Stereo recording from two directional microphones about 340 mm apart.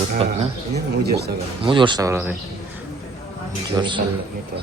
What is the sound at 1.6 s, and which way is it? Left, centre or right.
Speech, centre.